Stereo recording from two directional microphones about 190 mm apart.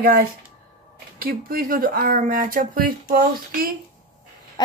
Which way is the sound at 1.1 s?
50° right (ahead or behind).